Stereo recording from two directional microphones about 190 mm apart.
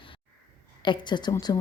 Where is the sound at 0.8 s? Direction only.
25° left (ahead or behind).